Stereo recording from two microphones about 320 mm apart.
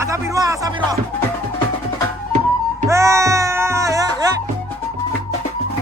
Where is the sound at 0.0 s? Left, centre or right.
Centre.